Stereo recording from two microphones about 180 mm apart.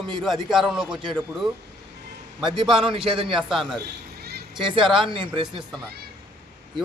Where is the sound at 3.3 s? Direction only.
Centre (ahead or behind).